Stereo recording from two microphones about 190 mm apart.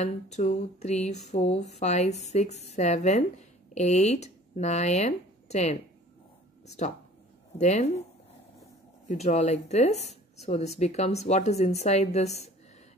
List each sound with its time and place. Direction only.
0.0 s speech: 35° left (ahead or behind)
7.5 s speech: 35° left (ahead or behind)
9.0 s speech: 35° left (ahead or behind)